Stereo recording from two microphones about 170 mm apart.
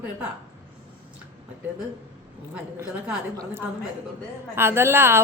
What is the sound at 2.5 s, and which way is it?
A woman's voice, 10° right (ahead or behind).